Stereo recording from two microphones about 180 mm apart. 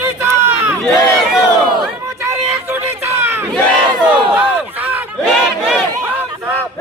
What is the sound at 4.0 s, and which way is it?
Crowd, 5° right (ahead or behind).